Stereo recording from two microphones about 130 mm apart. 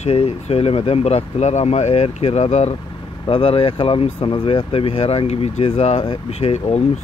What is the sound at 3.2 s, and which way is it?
Speech, 45° left (ahead or behind).